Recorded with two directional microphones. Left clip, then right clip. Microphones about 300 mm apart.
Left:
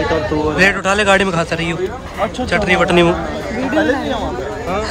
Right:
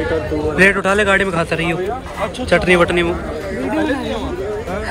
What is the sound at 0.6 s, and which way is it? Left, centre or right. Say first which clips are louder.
A man's voice: right 2 dB; centre.